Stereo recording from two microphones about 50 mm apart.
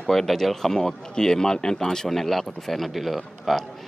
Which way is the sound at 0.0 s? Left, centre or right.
Centre.